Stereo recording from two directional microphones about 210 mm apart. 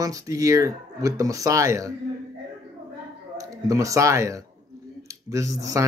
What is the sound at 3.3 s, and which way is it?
Speech, 15° right (ahead or behind).